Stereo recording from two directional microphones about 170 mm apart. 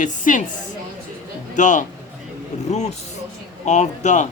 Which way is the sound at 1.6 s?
45° left (ahead or behind).